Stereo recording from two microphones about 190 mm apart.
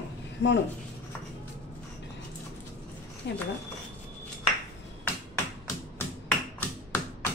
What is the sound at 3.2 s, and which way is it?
Speech, 70° left (ahead or behind).